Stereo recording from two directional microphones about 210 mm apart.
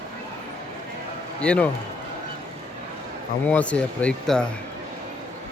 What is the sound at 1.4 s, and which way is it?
Speech, 5° left (ahead or behind).